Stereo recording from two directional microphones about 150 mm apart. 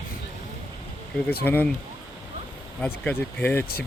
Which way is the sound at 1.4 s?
10° left (ahead or behind).